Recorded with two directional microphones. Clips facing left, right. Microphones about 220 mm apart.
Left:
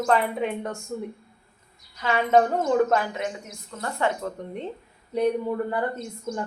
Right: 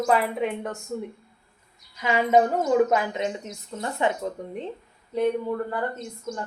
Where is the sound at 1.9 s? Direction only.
15° right (ahead or behind).